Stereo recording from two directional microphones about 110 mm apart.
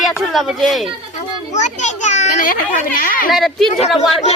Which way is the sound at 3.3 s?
Centre (ahead or behind).